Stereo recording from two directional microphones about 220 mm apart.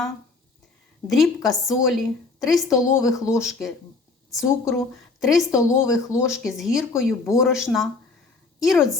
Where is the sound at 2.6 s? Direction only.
15° left (ahead or behind).